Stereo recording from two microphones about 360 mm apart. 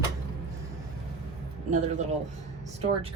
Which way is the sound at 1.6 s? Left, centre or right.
Centre.